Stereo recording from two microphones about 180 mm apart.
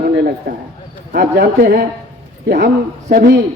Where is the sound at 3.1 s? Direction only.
70° right (ahead or behind).